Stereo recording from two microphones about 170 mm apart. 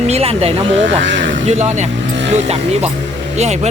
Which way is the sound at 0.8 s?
90° right.